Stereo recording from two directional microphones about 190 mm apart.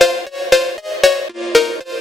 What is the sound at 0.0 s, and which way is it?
Music, centre (ahead or behind).